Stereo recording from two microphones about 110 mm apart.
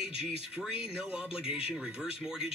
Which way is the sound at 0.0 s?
55° left (ahead or behind).